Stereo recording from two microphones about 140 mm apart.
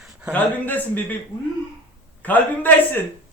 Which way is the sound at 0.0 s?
5° right (ahead or behind).